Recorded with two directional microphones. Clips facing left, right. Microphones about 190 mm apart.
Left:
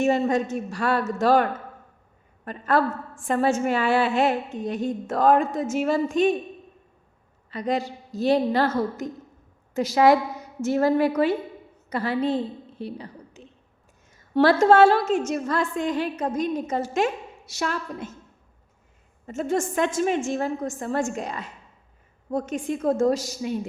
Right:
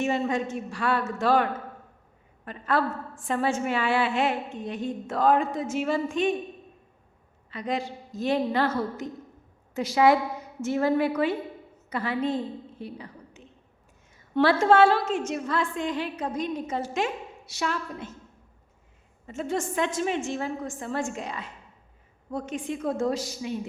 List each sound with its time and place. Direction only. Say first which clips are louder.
0.0 s a man's voice: left 5 dB; 40° left (ahead or behind)
7.5 s a man's voice: left 4 dB; 40° left (ahead or behind)
12.8 s a sound: left 4 dB; 35° left (ahead or behind)
14.6 s a woman's voice: left 3 dB; 40° left (ahead or behind)
19.3 s a woman's voice: left 4 dB; 45° left (ahead or behind)